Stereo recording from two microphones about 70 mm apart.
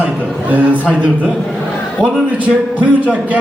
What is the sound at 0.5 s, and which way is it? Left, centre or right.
Speech, centre.